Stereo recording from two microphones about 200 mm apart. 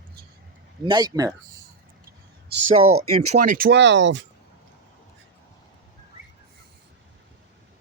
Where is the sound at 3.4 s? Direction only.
45° right (ahead or behind); by 4.2 s 65° right (ahead or behind).